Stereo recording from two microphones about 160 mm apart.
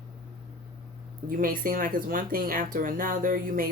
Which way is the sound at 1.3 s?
60° right (ahead or behind).